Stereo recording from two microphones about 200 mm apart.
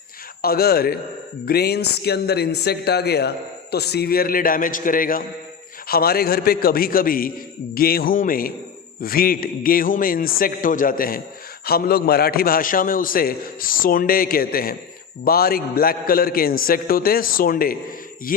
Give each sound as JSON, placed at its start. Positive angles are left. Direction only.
{"t": 0.4, "sound": "a man's voice", "side_deg": 50}